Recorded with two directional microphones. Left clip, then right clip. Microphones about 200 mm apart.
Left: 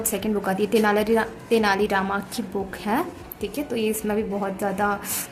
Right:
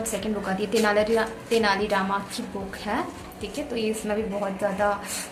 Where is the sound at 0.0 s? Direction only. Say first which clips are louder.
Left 3 dB; 45° left (ahead or behind).